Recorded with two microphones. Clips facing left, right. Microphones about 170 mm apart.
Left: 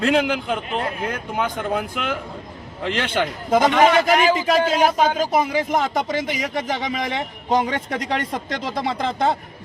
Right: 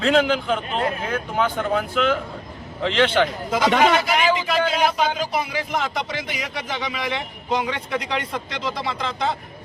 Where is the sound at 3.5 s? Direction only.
50° left (ahead or behind).